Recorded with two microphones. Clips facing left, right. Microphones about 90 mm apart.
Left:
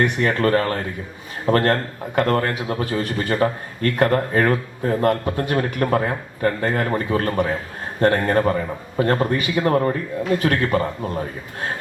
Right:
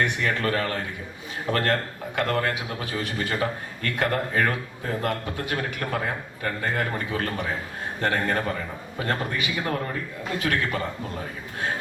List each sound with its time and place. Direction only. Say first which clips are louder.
0.0 s a man's voice: left 6 dB; 40° left (ahead or behind)